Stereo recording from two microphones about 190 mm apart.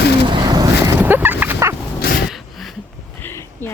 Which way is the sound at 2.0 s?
50° left (ahead or behind).